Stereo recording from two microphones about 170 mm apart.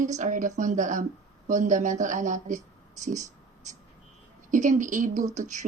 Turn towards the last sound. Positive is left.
turn(degrees=-45)  # may be behind; listen again after turning